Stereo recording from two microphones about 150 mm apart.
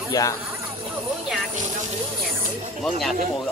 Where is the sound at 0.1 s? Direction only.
25° left (ahead or behind).